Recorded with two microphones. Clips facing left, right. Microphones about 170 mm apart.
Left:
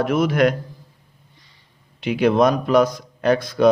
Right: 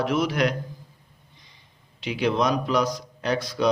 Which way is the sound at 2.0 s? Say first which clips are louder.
Left 7 dB; 55° left (ahead or behind).